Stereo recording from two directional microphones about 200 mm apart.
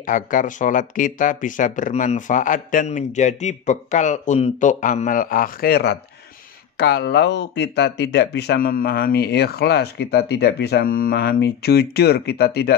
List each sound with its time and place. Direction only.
0.0 s speech: 40° left (ahead or behind)